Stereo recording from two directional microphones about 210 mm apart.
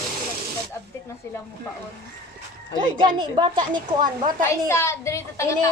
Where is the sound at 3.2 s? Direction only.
25° right (ahead or behind).